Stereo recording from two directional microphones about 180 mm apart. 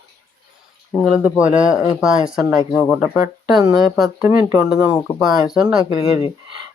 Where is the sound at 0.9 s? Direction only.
Centre (ahead or behind).